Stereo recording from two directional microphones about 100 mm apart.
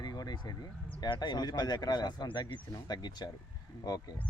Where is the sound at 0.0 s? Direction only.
45° left (ahead or behind).